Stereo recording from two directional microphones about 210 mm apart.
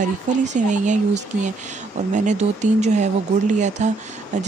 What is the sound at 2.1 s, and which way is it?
Speech, 35° right (ahead or behind).